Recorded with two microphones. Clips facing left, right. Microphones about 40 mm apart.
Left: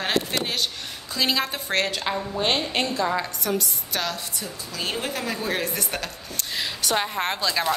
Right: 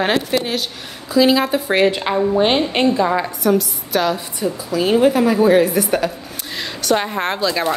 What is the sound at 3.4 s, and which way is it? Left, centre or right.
A woman's voice, centre.